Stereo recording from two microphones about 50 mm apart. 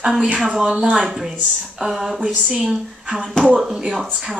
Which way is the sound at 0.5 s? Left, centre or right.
Centre.